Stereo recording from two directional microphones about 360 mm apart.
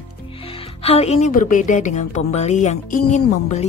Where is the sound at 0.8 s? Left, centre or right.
Centre.